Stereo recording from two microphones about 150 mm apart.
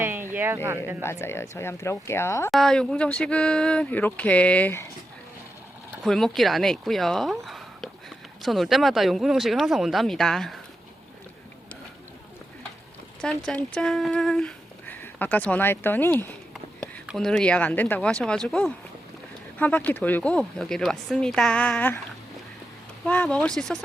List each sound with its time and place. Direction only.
0.0 s a sound: 15° right (ahead or behind)
0.3 s speech: 15° right (ahead or behind)
1.0 s speech: 15° left (ahead or behind)
2.5 s speech: 5° left (ahead or behind)
6.0 s speech: centre (ahead or behind)
13.4 s speech: 10° left (ahead or behind)
17.1 s speech: 5° left (ahead or behind)
23.0 s speech: 5° left (ahead or behind)